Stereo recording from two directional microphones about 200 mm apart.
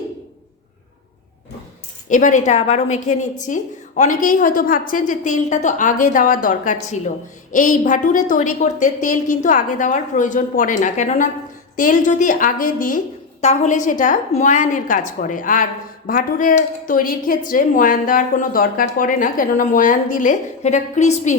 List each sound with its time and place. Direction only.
2.0 s a woman's voice: 40° left (ahead or behind)